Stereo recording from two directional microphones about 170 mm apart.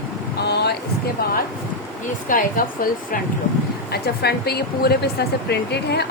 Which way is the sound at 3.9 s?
70° left (ahead or behind).